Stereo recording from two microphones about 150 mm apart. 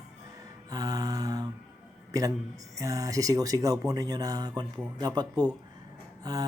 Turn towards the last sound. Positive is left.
turn(degrees=-25)  # may be behind; listen again after turning